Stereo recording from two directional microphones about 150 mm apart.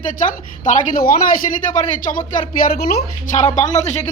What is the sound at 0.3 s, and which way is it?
Speech, 60° left (ahead or behind).